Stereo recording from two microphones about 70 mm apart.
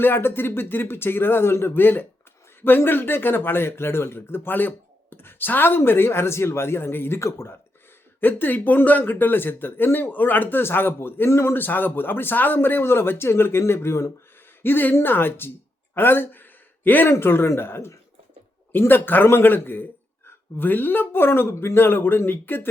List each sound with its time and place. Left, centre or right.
0.0 s speech: left
8.2 s a woman's voice: left